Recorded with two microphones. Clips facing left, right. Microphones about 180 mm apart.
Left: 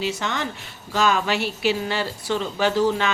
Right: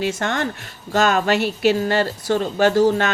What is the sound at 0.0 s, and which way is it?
Speech, 50° right (ahead or behind).